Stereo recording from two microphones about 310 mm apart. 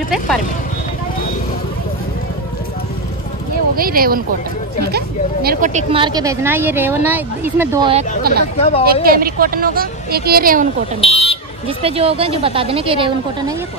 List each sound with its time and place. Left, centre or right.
3.7 s a woman's voice: right; by 7.9 s centre
7.9 s a woman's voice: right
8.5 s speech: centre
9.0 s a woman's voice: right
11.0 s speech: centre
11.6 s speech: centre